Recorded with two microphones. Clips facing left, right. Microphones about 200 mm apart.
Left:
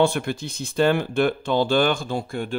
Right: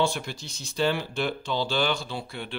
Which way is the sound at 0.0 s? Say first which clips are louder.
Left 7 dB; 60° left (ahead or behind).